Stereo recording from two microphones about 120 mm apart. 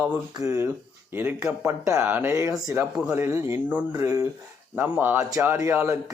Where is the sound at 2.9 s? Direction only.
10° right (ahead or behind).